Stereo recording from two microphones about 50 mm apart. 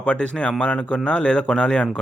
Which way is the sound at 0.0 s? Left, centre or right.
Left.